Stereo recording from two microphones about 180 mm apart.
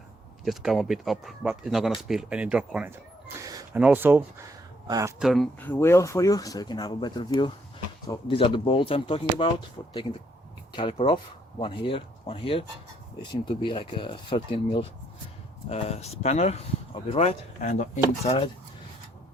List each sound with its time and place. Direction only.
0.4 s speech: centre (ahead or behind); by 3.7 s 20° right (ahead or behind)
3.8 s speech: 10° right (ahead or behind)
5.2 s speech: centre (ahead or behind); by 9.5 s 30° left (ahead or behind)
9.8 s speech: 20° left (ahead or behind); by 18.3 s 40° left (ahead or behind)